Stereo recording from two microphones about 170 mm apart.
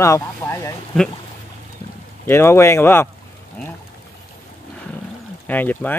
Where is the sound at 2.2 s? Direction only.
15° left (ahead or behind).